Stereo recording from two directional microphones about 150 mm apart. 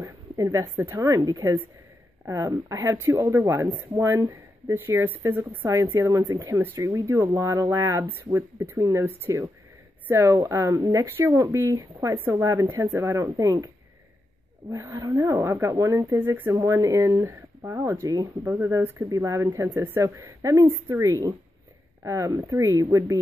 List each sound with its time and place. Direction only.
0.0 s speech: 20° right (ahead or behind)
14.7 s speech: 20° right (ahead or behind)